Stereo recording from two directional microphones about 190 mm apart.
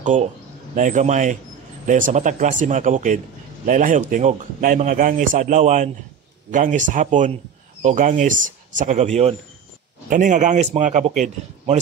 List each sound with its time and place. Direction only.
0.0 s a man's voice: 40° right (ahead or behind)